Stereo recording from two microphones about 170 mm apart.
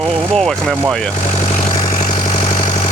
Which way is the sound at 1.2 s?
45° left (ahead or behind).